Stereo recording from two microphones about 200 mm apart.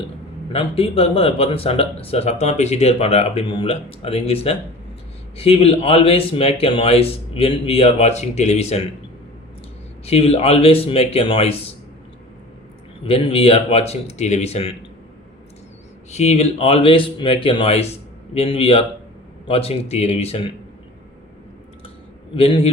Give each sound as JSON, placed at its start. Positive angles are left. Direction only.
{"t": 0.5, "sound": "speech", "side_deg": 30}
{"t": 10.1, "sound": "speech", "side_deg": 30}
{"t": 13.1, "sound": "speech", "side_deg": 25}
{"t": 16.1, "sound": "speech", "side_deg": 35}
{"t": 22.4, "sound": "speech", "side_deg": 30}